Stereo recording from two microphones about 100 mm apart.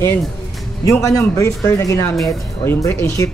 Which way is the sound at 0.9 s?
35° left (ahead or behind).